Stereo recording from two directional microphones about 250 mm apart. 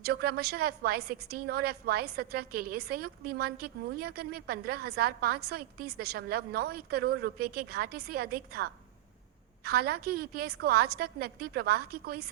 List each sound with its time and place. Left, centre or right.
0.0 s a woman's voice: right